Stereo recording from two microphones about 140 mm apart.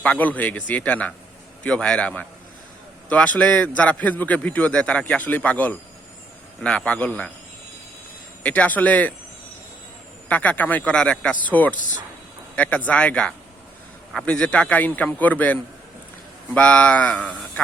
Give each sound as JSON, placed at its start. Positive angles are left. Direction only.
{"t": 0.0, "sound": "a man's voice", "side_deg": 10}
{"t": 8.4, "sound": "a man's voice", "side_deg": 10}
{"t": 10.2, "sound": "a man's voice", "side_deg": 10}
{"t": 11.7, "sound": "speech", "side_deg": 65}
{"t": 12.5, "sound": "a man's voice", "side_deg": 10}
{"t": 16.6, "sound": "a man's voice", "side_deg": 10}